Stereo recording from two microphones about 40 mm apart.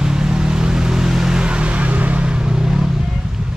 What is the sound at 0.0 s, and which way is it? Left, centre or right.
Vehicle, centre.